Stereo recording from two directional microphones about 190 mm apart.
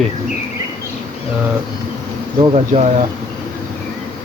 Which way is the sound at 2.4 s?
30° right (ahead or behind).